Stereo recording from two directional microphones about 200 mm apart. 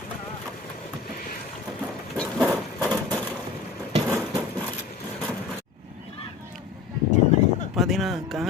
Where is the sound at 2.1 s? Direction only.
Centre (ahead or behind).